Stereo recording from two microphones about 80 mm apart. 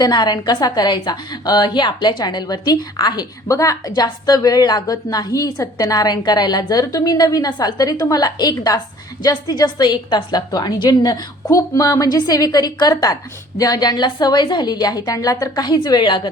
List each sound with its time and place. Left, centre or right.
0.0 s a woman's voice: left
3.5 s a woman's voice: left
3.9 s a woman's voice: left